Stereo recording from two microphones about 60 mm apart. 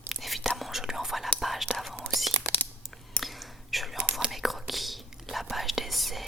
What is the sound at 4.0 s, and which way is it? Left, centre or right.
Whispering, centre.